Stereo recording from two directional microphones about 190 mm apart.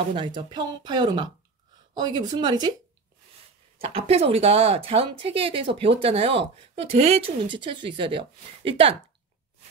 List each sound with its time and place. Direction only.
0.1 s speech: 25° right (ahead or behind)
3.8 s speech: 30° right (ahead or behind)